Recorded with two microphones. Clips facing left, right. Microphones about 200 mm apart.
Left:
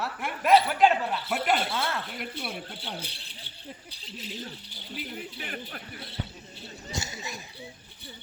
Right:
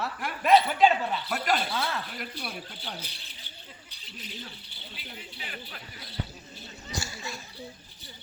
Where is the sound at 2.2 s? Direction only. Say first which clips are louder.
Left 2 dB; 25° left (ahead or behind).